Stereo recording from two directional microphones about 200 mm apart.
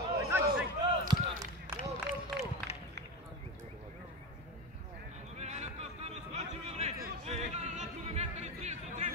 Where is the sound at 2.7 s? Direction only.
30° left (ahead or behind).